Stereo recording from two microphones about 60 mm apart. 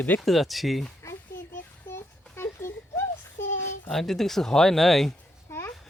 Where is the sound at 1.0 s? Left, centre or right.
Left.